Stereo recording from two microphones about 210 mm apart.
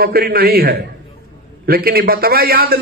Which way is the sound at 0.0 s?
45° right (ahead or behind).